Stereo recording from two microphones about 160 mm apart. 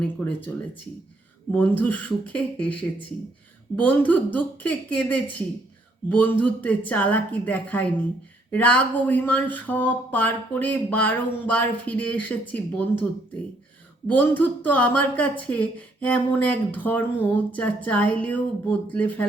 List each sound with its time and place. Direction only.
0.0 s speech: 10° left (ahead or behind)
14.1 s speech: 10° left (ahead or behind)